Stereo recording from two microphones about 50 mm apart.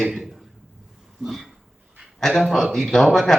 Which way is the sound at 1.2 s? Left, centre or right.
Centre.